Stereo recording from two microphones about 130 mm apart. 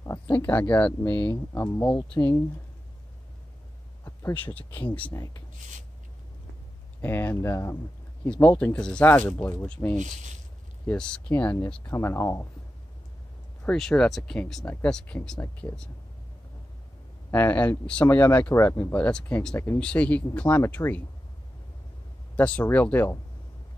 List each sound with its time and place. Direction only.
0.0 s a sound: 20° left (ahead or behind)
0.5 s speech: 10° left (ahead or behind)
1.9 s speech: 5° left (ahead or behind)
2.1 s speech: 20° left (ahead or behind)
4.0 s a sound: 20° left (ahead or behind)
4.6 s speech: 15° left (ahead or behind)
7.0 s speech: 15° left (ahead or behind)
8.3 s speech: 10° left (ahead or behind)
9.9 s speech: 65° right (ahead or behind)
10.9 s speech: 10° left (ahead or behind)
13.7 s speech: 5° left (ahead or behind)
17.3 s speech: 15° left (ahead or behind)
22.3 s speech: 10° left (ahead or behind)